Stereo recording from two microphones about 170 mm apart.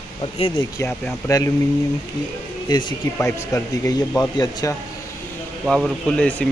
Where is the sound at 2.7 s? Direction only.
25° left (ahead or behind).